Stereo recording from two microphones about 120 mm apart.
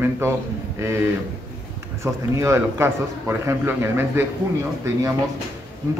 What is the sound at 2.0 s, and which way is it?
A man's voice, 25° right (ahead or behind).